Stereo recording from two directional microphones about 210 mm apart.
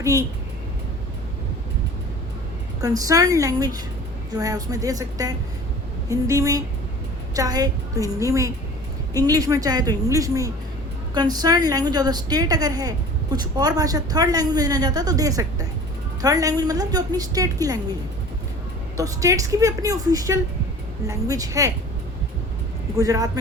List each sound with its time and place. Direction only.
0.0 s a woman's voice: 15° right (ahead or behind)
2.8 s a woman's voice: 15° right (ahead or behind)
18.9 s a woman's voice: 15° right (ahead or behind)
23.0 s a woman's voice: 15° right (ahead or behind)